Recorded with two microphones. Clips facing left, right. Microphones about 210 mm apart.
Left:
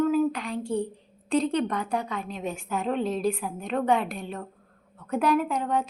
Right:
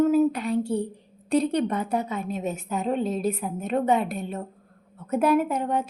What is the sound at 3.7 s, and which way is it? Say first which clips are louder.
Speech: right 3 dB; 20° right (ahead or behind).